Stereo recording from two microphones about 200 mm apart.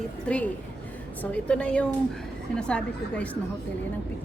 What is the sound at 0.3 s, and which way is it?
A woman's voice, 5° left (ahead or behind).